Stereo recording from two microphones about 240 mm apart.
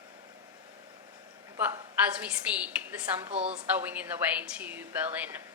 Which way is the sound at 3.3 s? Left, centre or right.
Right.